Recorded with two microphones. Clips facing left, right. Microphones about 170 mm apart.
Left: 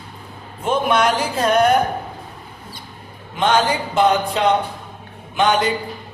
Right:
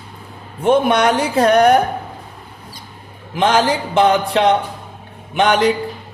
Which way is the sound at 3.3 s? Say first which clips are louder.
Right 2 dB; 80° right.